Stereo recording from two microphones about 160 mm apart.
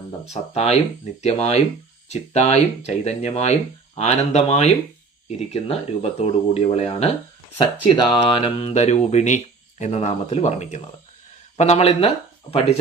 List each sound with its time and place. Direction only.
0.3 s speech: 40° left (ahead or behind)